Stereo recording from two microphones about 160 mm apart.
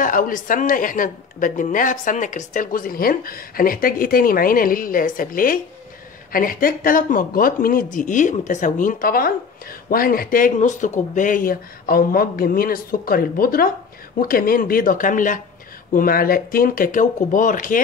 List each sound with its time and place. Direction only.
0.0 s speech: 55° left (ahead or behind)